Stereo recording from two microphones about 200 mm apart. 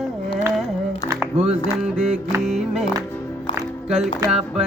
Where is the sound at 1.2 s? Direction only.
5° right (ahead or behind).